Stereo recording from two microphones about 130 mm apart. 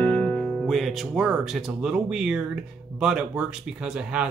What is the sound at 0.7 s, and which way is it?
Speech, centre (ahead or behind).